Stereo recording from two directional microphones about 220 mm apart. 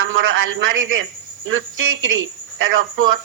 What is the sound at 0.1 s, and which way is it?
A woman's voice, 60° right (ahead or behind).